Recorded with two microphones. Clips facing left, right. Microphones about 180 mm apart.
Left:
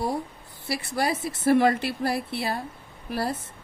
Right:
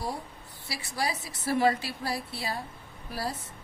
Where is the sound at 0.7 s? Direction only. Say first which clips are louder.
Left 6 dB; 55° left (ahead or behind).